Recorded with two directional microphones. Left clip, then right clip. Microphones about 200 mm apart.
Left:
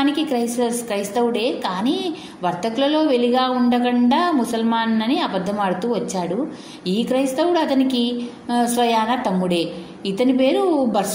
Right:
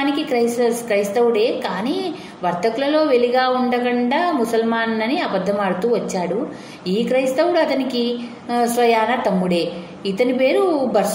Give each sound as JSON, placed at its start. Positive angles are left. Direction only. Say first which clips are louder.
{"t": 0.0, "sound": "a woman's voice", "louder": "right 2 dB", "side_deg": 35}
{"t": 10.1, "sound": "a woman's voice", "louder": "right 1 dB", "side_deg": 35}